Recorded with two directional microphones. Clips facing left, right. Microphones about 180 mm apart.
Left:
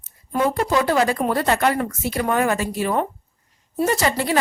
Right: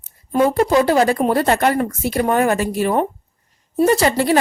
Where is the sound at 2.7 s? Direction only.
50° right (ahead or behind).